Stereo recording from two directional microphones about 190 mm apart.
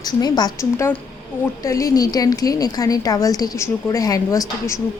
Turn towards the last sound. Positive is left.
turn(degrees=15)  # may be behind; listen again after turning